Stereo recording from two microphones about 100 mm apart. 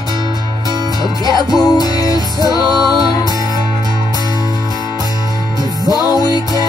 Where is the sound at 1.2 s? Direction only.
40° left (ahead or behind).